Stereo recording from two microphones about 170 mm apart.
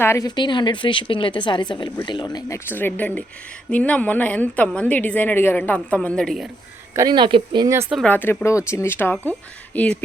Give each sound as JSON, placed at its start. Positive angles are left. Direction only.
{"t": 0.0, "sound": "a woman's voice", "side_deg": 15}
{"t": 2.6, "sound": "a woman's voice", "side_deg": 10}
{"t": 6.9, "sound": "speech", "side_deg": -25}
{"t": 8.0, "sound": "a woman's voice", "side_deg": 10}